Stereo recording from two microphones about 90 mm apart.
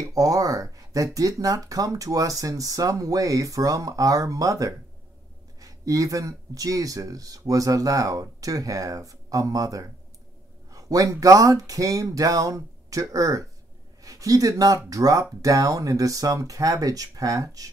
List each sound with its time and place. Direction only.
0.0 s speech: 40° right (ahead or behind)